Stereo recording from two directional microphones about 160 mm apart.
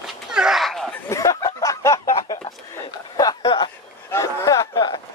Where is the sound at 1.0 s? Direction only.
20° left (ahead or behind).